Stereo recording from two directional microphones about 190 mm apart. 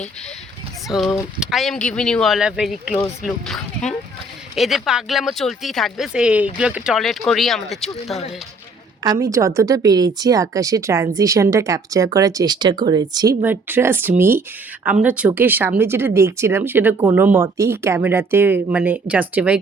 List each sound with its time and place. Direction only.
0.9 s speech: centre (ahead or behind)
9.0 s speech: 15° right (ahead or behind)
13.4 s speech: 10° right (ahead or behind)